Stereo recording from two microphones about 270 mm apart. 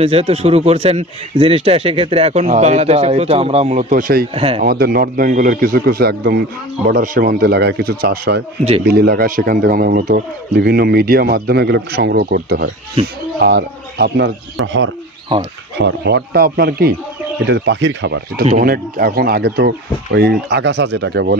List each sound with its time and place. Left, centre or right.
0.0 s a man's voice: right
4.3 s a man's voice: right
4.6 s speech: right